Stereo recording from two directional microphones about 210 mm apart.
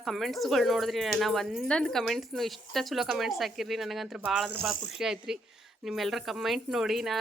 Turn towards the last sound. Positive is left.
turn(degrees=0)  # may be behind; listen again after turning